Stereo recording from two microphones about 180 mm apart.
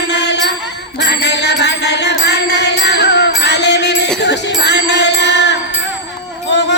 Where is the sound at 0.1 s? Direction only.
70° left (ahead or behind).